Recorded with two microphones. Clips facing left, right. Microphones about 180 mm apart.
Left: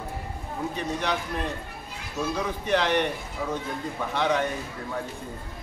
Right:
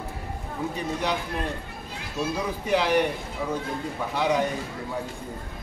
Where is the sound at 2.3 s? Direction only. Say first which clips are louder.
Even; 10° right (ahead or behind).